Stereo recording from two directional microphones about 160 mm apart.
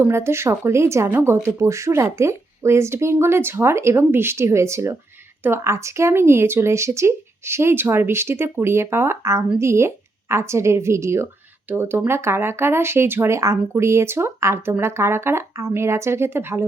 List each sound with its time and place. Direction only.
0.0 s speech: 15° right (ahead or behind)